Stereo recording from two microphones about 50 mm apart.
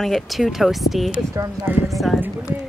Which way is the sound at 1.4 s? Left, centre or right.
Right.